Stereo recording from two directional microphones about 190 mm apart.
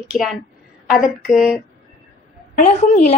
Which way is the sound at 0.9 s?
45° left (ahead or behind).